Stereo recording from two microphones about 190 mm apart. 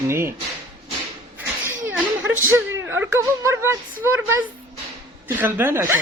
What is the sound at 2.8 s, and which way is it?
Speech, 10° right (ahead or behind).